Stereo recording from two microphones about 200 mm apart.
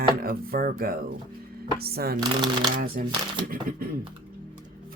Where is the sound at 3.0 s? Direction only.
45° right (ahead or behind).